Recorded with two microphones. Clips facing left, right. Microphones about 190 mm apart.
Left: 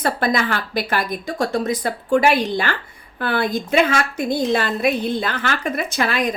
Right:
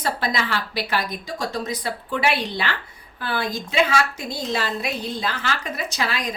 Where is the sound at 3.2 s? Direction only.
55° left (ahead or behind).